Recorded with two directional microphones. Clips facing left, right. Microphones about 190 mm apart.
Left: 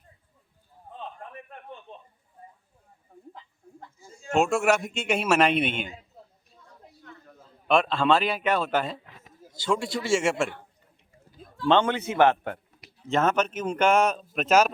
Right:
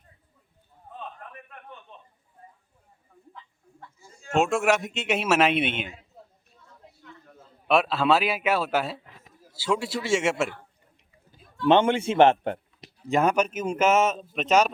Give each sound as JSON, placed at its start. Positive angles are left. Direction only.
{"t": 0.9, "sound": "a sound", "side_deg": 30}
{"t": 4.3, "sound": "a man's voice", "side_deg": 0}
{"t": 7.3, "sound": "a man's voice", "side_deg": 0}
{"t": 11.6, "sound": "a man's voice", "side_deg": -20}
{"t": 13.1, "sound": "a man's voice", "side_deg": -15}